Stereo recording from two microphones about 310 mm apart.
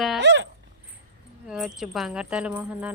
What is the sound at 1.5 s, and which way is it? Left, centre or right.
Speech, centre.